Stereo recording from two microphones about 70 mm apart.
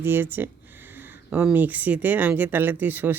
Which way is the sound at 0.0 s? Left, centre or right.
Right.